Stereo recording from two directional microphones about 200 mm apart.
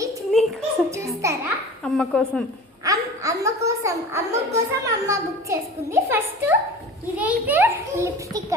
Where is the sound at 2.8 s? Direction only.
15° right (ahead or behind).